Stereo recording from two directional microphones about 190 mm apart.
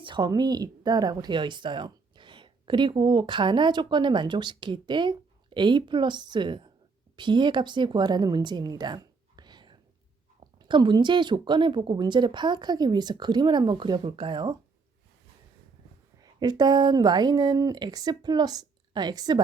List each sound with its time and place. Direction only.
0.0 s speech: 25° right (ahead or behind)
16.2 s speech: 20° right (ahead or behind)